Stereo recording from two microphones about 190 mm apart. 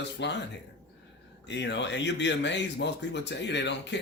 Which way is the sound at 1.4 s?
70° left (ahead or behind).